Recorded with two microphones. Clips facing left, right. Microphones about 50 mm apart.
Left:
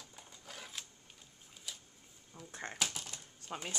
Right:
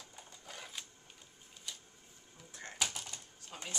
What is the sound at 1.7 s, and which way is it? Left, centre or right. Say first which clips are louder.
Printer: even; centre.